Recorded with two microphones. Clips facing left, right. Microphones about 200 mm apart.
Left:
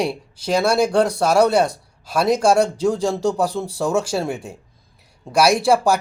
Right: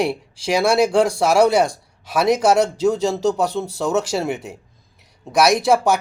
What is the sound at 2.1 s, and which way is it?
Speech, 5° right (ahead or behind).